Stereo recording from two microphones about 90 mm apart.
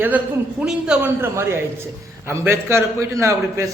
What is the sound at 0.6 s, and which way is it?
Speech, 5° right (ahead or behind).